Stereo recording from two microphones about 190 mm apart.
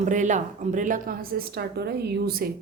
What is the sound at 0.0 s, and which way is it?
A woman's voice, 40° right (ahead or behind).